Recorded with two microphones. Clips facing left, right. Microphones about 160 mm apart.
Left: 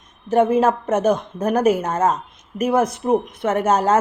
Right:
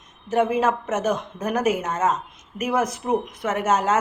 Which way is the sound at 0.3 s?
30° left (ahead or behind).